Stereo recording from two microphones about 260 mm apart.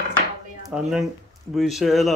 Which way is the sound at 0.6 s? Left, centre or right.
Centre.